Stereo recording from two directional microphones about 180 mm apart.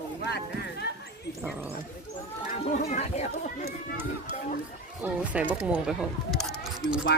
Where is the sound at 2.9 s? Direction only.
40° left (ahead or behind).